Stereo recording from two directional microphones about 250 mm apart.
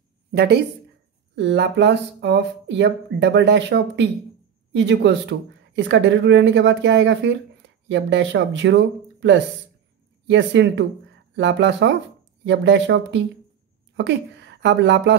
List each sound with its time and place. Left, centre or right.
0.3 s speech: right